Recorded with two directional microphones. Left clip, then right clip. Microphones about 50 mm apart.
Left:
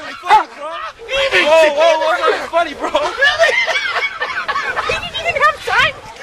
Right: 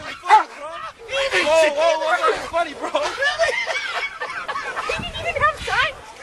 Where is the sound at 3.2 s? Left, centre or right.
Left.